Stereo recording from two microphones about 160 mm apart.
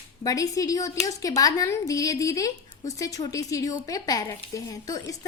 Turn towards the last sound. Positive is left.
turn(degrees=20)  # may be behind; listen again after turning